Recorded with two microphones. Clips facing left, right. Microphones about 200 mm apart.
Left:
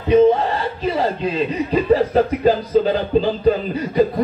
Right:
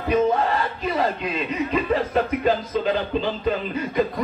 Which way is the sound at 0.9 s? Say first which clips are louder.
Left 3 dB; 35° left (ahead or behind).